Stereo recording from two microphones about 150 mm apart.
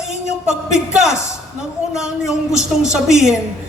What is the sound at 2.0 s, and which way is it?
Speech, 5° right (ahead or behind).